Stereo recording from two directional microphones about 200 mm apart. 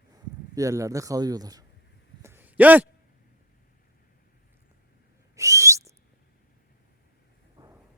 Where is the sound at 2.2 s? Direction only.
10° right (ahead or behind).